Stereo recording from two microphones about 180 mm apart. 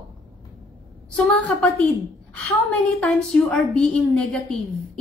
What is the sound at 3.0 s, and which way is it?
A woman's voice, 5° left (ahead or behind).